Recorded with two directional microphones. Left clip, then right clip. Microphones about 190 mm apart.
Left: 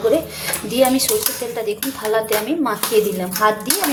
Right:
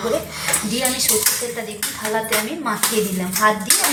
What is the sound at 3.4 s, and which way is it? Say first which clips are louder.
Speech: even; 55° left (ahead or behind).